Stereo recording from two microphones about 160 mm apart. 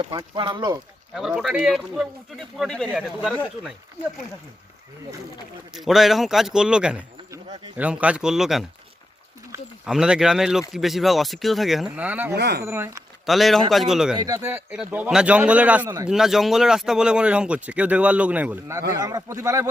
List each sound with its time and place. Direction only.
0.0 s speech: 30° right (ahead or behind)
1.1 s speech: 5° right (ahead or behind)
5.7 s speech: centre (ahead or behind)
9.8 s speech: 5° right (ahead or behind)
12.4 s speech: 90° right
12.6 s speech: 15° right (ahead or behind)
13.2 s speech: centre (ahead or behind)
14.3 s speech: 15° right (ahead or behind)
18.9 s speech: 20° right (ahead or behind)